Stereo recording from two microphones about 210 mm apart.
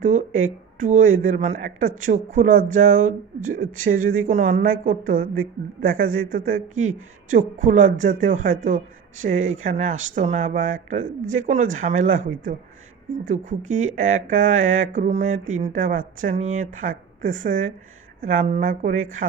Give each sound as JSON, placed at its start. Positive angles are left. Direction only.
{"t": 0.0, "sound": "speech", "side_deg": -35}
{"t": 6.7, "sound": "speech", "side_deg": -75}
{"t": 7.3, "sound": "speech", "side_deg": -40}